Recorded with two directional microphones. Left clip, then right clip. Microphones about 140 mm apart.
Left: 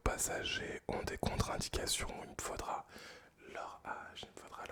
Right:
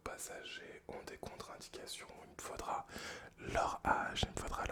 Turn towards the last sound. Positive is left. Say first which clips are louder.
# right 9 dB
turn(degrees=-35)  # may be behind; listen again after turning